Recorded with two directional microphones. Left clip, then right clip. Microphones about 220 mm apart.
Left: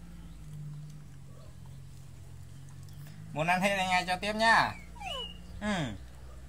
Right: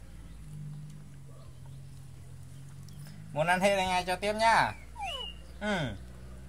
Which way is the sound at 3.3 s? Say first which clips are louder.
Right 2 dB; 35° right (ahead or behind).